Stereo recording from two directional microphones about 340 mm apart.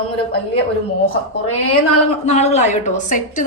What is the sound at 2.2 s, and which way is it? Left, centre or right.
A woman's voice, centre.